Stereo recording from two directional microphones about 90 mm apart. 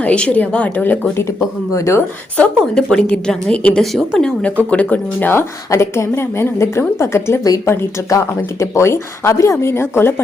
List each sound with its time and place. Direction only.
0.0 s a woman's voice: 15° left (ahead or behind)
1.7 s speech: 35° left (ahead or behind)
2.7 s a woman's voice: 10° left (ahead or behind)
3.9 s speech: 5° left (ahead or behind)
4.7 s speech: 15° left (ahead or behind)